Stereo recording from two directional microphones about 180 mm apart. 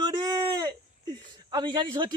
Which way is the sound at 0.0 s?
20° right (ahead or behind).